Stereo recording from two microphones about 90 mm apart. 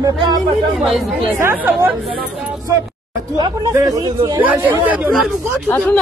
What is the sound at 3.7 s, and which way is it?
Speech, 40° right (ahead or behind).